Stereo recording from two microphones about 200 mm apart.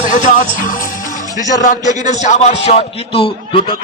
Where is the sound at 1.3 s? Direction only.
40° left (ahead or behind).